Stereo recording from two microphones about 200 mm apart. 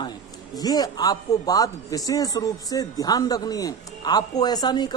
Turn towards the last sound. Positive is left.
turn(degrees=20)  # may be behind; listen again after turning